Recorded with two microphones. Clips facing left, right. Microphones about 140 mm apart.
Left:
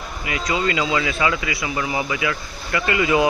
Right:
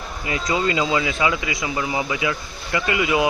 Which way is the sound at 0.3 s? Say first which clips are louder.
Right 1 dB; 30° right (ahead or behind).